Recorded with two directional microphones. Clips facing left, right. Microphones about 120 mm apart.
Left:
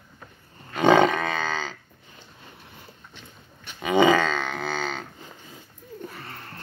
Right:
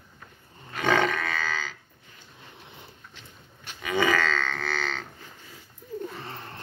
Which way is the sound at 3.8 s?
20° left (ahead or behind).